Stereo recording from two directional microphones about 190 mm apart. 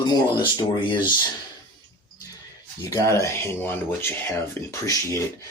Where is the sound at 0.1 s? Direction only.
25° left (ahead or behind).